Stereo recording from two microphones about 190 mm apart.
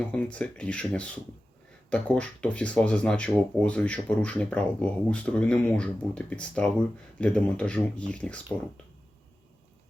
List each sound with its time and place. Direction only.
0.0 s speech: 5° left (ahead or behind)